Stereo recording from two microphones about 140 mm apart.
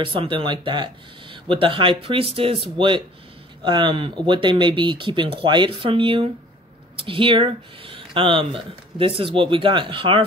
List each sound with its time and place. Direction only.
0.0 s speech: 40° right (ahead or behind)